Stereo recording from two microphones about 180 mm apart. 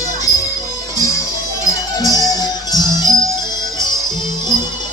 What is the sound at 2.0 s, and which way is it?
Music, 20° left (ahead or behind).